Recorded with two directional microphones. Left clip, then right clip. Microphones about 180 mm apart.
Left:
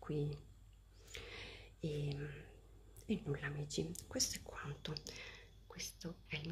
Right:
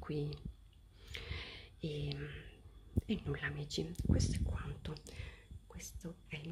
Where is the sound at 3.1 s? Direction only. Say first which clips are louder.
Right 1 dB; 5° right (ahead or behind).